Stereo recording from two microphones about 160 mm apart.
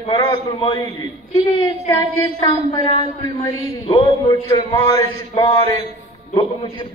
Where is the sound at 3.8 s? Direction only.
25° left (ahead or behind).